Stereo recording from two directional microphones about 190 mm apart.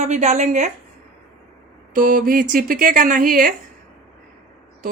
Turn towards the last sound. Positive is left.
turn(degrees=-45)  # may be behind; listen again after turning